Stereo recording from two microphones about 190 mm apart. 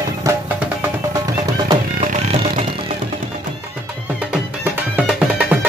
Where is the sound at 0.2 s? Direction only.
15° right (ahead or behind).